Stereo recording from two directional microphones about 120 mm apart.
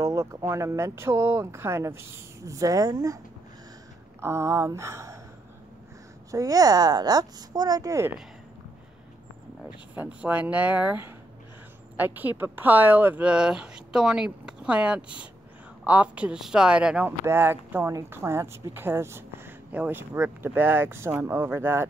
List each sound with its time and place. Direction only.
0.0 s speech: 25° right (ahead or behind)
4.2 s speech: 20° right (ahead or behind)
6.3 s speech: 30° right (ahead or behind)
9.7 s speech: 10° right (ahead or behind)